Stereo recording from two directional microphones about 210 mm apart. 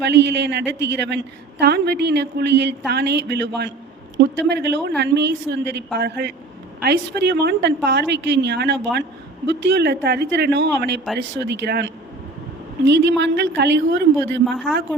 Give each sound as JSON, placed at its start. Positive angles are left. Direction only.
{"t": 0.0, "sound": "a woman's voice", "side_deg": -55}